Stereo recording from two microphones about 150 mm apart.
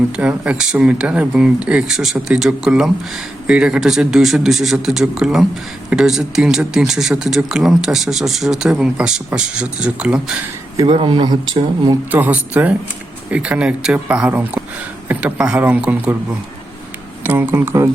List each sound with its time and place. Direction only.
0.2 s speech: 5° right (ahead or behind)
10.8 s speech: 35° right (ahead or behind)
12.1 s speech: 10° right (ahead or behind)
17.2 s speech: 15° right (ahead or behind)